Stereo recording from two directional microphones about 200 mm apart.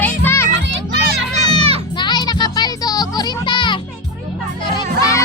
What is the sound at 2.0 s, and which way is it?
Music, 20° left (ahead or behind).